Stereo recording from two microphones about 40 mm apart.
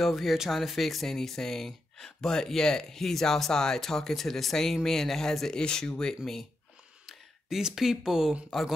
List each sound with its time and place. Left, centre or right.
0.0 s speech: centre
5.6 s speech: left
7.4 s speech: centre